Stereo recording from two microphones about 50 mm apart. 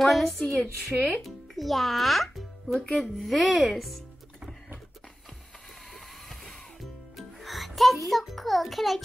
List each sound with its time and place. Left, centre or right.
0.0 s speech: centre
0.9 s speech: right
1.2 s a child's voice: centre
6.8 s music: centre